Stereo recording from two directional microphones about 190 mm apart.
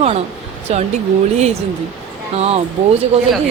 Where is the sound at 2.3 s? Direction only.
35° right (ahead or behind).